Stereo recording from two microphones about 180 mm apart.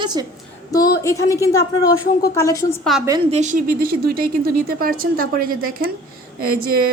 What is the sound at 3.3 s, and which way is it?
Speech, 40° right (ahead or behind).